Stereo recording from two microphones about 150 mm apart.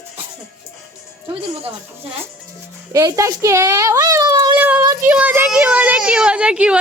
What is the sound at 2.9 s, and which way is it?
Speech, 20° right (ahead or behind).